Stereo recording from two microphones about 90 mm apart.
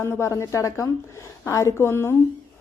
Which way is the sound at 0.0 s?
30° left (ahead or behind).